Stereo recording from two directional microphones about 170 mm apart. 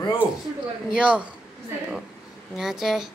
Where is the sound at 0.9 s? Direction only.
5° right (ahead or behind).